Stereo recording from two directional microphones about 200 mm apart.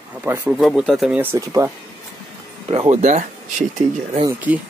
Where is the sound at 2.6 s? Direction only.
30° right (ahead or behind).